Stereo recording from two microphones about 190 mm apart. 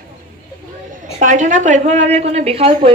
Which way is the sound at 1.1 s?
40° right (ahead or behind).